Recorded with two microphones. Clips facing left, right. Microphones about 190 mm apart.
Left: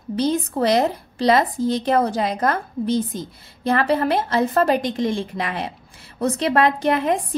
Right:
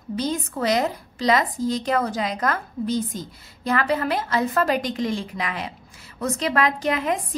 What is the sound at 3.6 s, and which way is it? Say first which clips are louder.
A woman's voice: left 4 dB; 30° left (ahead or behind).